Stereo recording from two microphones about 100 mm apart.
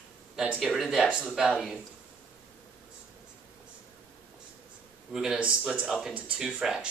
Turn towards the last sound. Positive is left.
turn(degrees=-10)  # may be behind; listen again after turning